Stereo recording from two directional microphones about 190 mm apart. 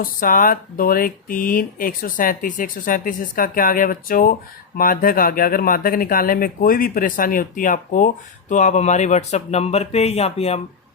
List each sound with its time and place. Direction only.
0.0 s speech: 45° left (ahead or behind)